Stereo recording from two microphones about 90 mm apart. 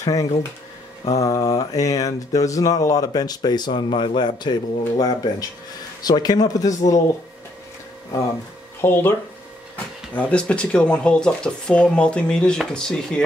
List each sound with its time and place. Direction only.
0.0 s speech: 40° left (ahead or behind)
1.0 s mantra: 40° left (ahead or behind)
8.8 s speech: 25° left (ahead or behind)
10.1 s speech: 10° left (ahead or behind)